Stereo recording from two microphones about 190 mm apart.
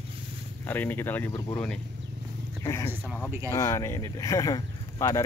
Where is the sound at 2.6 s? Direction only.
15° left (ahead or behind).